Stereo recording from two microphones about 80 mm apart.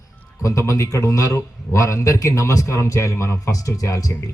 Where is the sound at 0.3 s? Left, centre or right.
Left.